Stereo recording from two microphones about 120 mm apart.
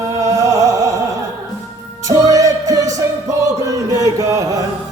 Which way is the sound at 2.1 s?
30° right (ahead or behind).